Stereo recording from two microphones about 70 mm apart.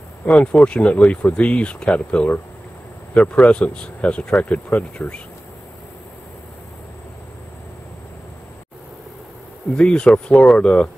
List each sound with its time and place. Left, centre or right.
0.2 s speech: centre
9.8 s speech: centre